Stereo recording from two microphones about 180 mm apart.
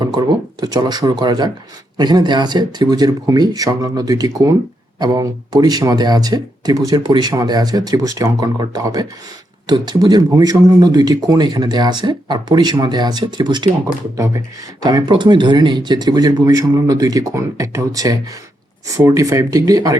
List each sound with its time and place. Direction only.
0.0 s speech: 25° right (ahead or behind)